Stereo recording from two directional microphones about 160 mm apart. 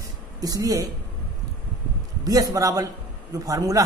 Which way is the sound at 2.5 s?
20° right (ahead or behind).